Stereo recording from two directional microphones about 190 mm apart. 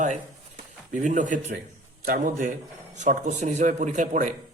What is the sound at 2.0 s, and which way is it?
A man's voice, 45° right (ahead or behind).